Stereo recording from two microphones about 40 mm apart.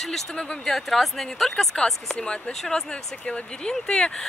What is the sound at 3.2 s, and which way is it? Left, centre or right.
Speech, left.